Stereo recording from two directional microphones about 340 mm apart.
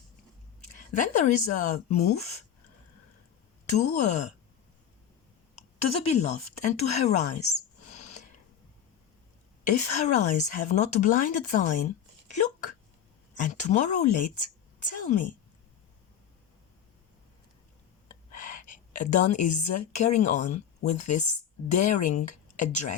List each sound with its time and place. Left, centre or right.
0.8 s a woman's voice: left
3.7 s a woman's voice: left
6.1 s a woman's voice: centre
9.6 s a woman's voice: left
13.4 s a woman's voice: left
18.3 s a sound: left
20.0 s a woman's voice: centre